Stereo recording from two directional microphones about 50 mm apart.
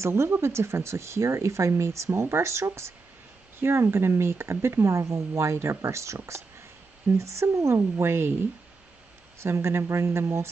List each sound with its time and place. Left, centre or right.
0.0 s speech: right
3.5 s speech: right
7.7 s speech: right
9.4 s speech: right